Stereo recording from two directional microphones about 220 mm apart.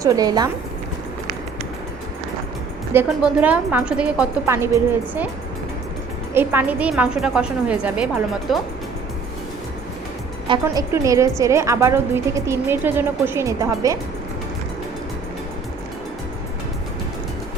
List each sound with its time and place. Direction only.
0.0 s a woman's voice: 15° right (ahead or behind)
2.9 s a woman's voice: 10° right (ahead or behind)
6.3 s a woman's voice: 10° right (ahead or behind)
10.5 s a woman's voice: 15° right (ahead or behind)